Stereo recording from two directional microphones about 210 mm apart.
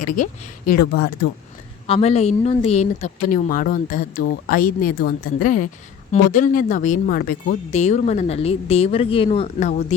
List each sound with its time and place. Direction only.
0.7 s speech: 50° left (ahead or behind)
1.9 s speech: 30° left (ahead or behind)